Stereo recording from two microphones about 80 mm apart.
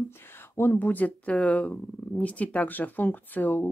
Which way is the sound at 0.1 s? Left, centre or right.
Left.